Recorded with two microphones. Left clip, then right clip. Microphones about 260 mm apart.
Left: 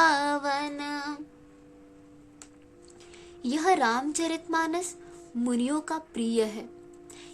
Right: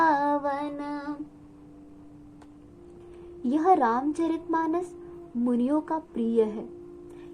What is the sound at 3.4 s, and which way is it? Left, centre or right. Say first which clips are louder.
Child singing: right 2 dB; left.